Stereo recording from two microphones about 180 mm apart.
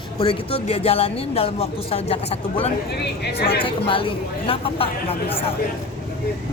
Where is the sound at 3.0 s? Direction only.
60° left (ahead or behind).